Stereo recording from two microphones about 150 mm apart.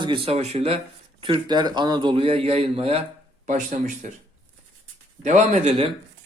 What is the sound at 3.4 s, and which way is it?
Speech, 55° right (ahead or behind).